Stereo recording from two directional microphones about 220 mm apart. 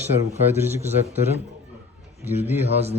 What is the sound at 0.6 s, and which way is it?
Speech, 10° right (ahead or behind).